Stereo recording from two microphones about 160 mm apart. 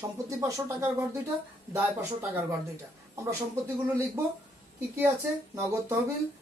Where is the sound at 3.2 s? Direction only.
20° right (ahead or behind).